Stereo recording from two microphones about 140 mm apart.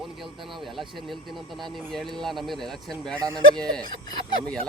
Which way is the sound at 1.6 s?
Centre (ahead or behind).